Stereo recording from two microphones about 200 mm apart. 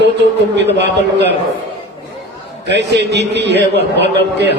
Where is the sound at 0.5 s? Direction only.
60° right (ahead or behind).